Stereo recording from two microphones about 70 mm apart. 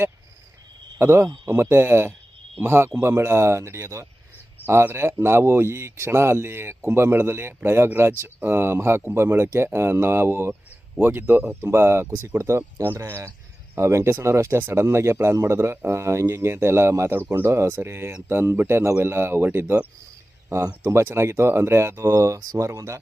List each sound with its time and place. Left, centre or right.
0.9 s speech: right
20.8 s speech: right